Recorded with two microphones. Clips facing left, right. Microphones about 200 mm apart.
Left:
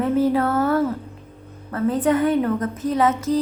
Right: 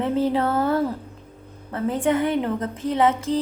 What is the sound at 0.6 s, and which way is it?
A woman's voice, 25° right (ahead or behind).